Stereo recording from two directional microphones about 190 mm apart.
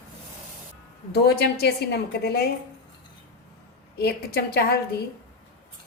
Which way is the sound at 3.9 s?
55° left (ahead or behind).